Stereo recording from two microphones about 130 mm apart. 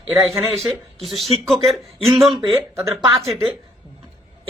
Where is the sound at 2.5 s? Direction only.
15° right (ahead or behind).